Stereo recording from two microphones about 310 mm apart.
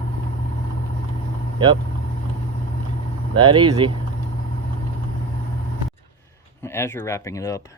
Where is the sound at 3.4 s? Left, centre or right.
Centre.